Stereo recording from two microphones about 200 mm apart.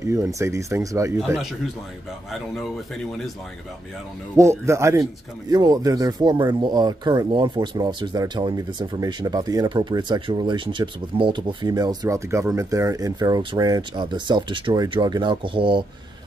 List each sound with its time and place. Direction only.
0.0 s speech: 15° right (ahead or behind)
2.3 s speech: centre (ahead or behind)
4.4 s speech: 15° right (ahead or behind)